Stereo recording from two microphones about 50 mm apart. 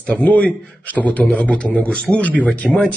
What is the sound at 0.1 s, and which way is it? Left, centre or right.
A man's voice, left.